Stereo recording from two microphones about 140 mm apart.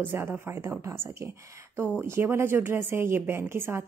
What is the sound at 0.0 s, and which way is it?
A woman's voice, 15° right (ahead or behind).